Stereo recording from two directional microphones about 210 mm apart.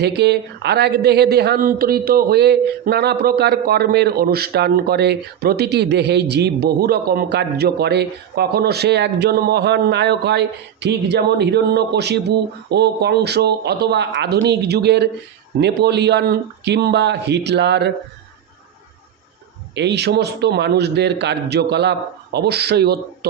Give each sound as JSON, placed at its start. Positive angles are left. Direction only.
{"t": 0.0, "sound": "speech", "side_deg": -50}
{"t": 19.7, "sound": "speech", "side_deg": -55}